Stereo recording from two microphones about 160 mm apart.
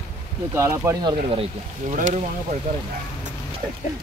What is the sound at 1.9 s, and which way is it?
Speech, 45° right (ahead or behind).